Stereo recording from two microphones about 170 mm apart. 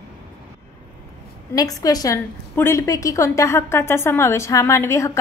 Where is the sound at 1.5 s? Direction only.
20° left (ahead or behind).